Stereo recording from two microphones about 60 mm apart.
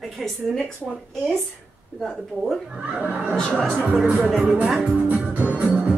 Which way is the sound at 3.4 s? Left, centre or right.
Centre.